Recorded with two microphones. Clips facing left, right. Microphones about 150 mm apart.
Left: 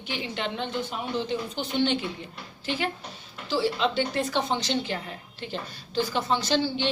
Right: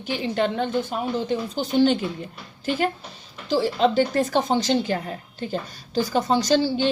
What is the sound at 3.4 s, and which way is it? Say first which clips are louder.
A woman's voice: right 5 dB; 45° right (ahead or behind).